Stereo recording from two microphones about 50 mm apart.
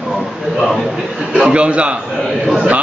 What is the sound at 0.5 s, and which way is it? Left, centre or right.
Speech, centre.